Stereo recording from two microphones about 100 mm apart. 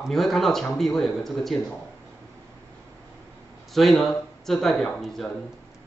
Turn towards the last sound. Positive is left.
turn(degrees=5)  # may be behind; listen again after turning